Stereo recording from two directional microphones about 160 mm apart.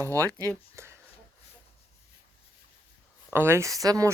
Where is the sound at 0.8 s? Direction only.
15° right (ahead or behind).